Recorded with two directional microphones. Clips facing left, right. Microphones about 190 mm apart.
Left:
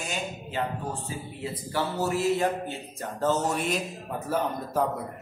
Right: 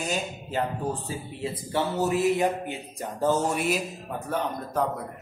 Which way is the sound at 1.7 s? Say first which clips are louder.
Right 2 dB; 20° right (ahead or behind).